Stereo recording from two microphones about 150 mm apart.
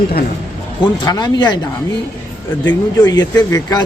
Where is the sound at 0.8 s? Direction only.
30° left (ahead or behind).